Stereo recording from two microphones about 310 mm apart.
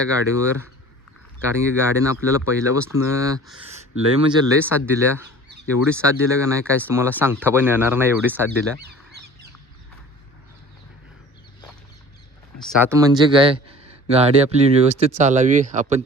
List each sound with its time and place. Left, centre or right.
0.0 s speech: centre
12.5 s speech: centre; by 16.0 s right